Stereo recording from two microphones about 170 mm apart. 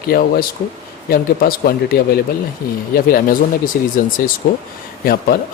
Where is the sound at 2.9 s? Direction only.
55° left (ahead or behind).